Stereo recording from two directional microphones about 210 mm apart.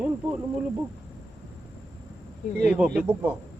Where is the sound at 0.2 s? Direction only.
5° right (ahead or behind).